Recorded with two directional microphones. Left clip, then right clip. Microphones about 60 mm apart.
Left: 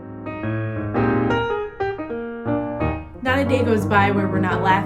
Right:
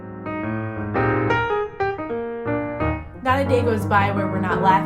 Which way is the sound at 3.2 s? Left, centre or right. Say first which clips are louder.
Right 1 dB; right.